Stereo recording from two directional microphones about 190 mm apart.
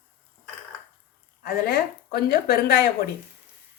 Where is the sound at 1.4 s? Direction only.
50° left (ahead or behind).